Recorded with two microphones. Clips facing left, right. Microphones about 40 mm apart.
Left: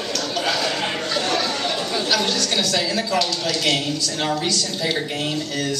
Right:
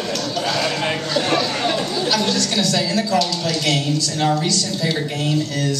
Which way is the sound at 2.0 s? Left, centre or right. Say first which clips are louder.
Right 1 dB; centre.